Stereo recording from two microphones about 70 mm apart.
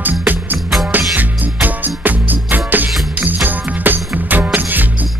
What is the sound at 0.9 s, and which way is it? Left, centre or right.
Music, right.